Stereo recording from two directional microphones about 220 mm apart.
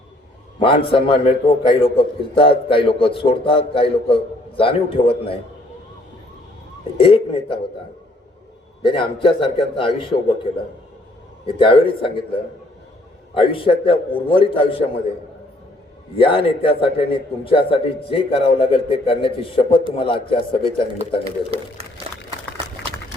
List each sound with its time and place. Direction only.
0.6 s a man's voice: 25° left (ahead or behind)
6.9 s a man's voice: 25° left (ahead or behind)
8.8 s a man's voice: 25° left (ahead or behind)
11.4 s a man's voice: 25° left (ahead or behind)
16.1 s a man's voice: 25° left (ahead or behind)
21.2 s speech: 25° right (ahead or behind)